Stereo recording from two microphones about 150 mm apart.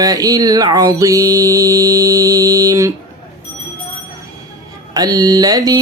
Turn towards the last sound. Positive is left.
turn(degrees=-25)  # may be behind; listen again after turning